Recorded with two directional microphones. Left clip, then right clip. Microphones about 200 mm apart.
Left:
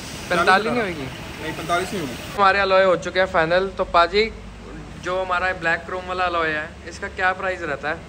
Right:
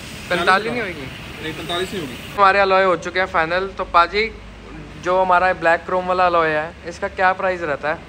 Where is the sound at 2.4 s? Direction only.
15° left (ahead or behind).